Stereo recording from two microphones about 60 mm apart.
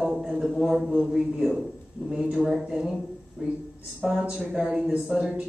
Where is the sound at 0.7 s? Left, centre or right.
Centre.